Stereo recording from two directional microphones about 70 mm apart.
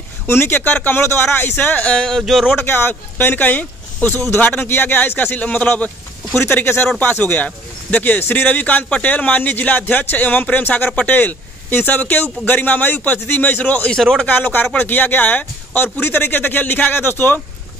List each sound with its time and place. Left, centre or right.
0.3 s speech: left
2.0 s speech: centre
2.5 s speech: left
6.4 s speech: left
13.9 s speech: centre
14.2 s speech: left